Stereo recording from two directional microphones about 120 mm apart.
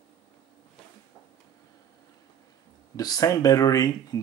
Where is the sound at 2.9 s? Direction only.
30° left (ahead or behind).